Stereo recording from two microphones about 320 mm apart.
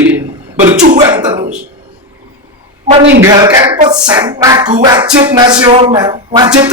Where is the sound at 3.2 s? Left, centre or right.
Centre.